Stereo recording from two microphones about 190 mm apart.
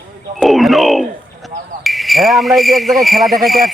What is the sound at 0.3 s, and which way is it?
Speech, centre (ahead or behind).